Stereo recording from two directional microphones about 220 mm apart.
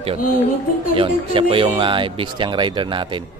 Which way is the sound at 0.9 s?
25° right (ahead or behind).